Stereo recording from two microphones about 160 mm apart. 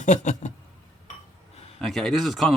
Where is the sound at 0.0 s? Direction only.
50° left (ahead or behind).